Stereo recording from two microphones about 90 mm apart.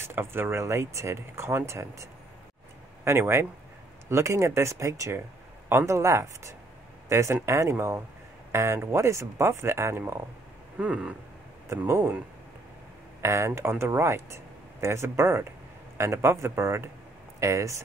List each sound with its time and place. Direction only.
0.1 s speech: 25° right (ahead or behind)
3.1 s speech: 30° right (ahead or behind)
10.8 s a sound: 15° right (ahead or behind)
13.2 s speech: 35° right (ahead or behind)